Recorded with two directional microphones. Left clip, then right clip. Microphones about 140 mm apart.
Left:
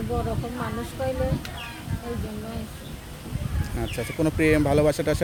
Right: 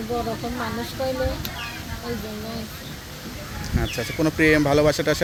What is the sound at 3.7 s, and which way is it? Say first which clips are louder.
Speech: right 3 dB; centre (ahead or behind).